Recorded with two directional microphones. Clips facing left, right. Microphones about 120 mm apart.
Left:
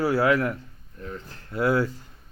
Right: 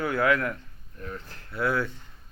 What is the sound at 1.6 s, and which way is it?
Speech, 40° left (ahead or behind).